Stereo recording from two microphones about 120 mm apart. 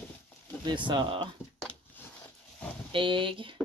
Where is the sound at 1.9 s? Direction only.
15° left (ahead or behind).